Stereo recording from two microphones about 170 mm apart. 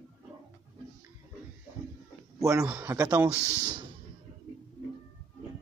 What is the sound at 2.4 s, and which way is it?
Speech, 20° right (ahead or behind).